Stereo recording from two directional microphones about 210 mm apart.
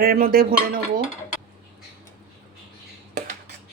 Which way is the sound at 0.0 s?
45° right (ahead or behind).